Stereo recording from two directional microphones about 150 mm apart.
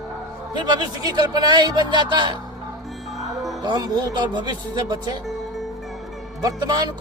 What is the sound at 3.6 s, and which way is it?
Speech, 30° right (ahead or behind).